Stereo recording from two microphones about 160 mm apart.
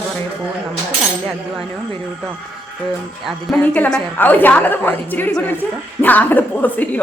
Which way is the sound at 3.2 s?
5° left (ahead or behind).